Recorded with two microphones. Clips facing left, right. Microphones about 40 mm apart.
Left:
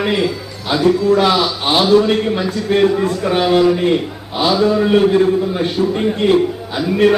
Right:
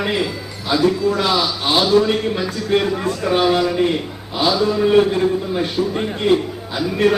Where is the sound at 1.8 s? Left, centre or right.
Centre.